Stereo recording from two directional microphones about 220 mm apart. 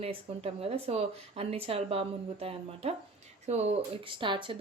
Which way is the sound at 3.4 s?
30° right (ahead or behind).